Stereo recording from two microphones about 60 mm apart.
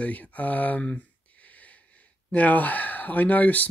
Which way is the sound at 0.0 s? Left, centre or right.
Left.